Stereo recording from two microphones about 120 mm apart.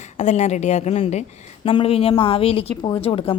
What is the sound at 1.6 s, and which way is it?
A woman's voice, 50° left (ahead or behind).